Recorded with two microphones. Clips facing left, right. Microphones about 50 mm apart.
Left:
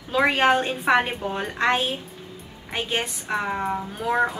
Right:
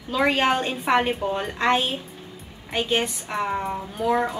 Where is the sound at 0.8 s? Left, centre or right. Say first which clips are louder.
Right 1 dB; centre.